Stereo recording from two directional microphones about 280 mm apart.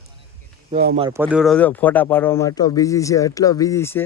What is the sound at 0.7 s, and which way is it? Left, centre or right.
Speech, right.